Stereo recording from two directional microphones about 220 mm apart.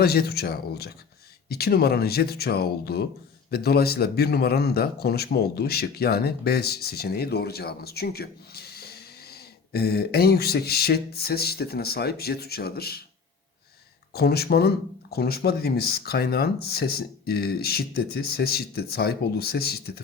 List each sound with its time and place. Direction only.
0.0 s a man's voice: 45° left (ahead or behind)
14.1 s a man's voice: 45° left (ahead or behind)